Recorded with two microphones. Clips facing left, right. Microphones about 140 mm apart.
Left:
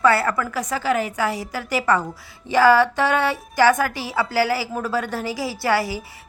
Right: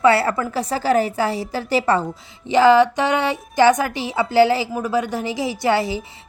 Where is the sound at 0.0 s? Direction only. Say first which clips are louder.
Right 2 dB; 25° right (ahead or behind).